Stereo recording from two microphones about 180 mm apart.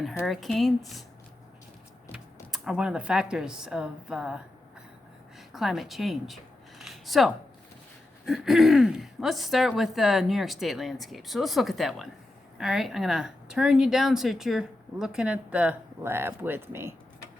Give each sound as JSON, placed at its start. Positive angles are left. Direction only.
{"t": 0.2, "sound": "speech", "side_deg": 0}
{"t": 2.1, "sound": "speech", "side_deg": -5}
{"t": 5.5, "sound": "speech", "side_deg": 0}